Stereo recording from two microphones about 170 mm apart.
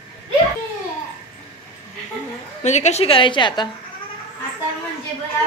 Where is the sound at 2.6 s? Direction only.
45° left (ahead or behind); by 3.6 s 30° left (ahead or behind).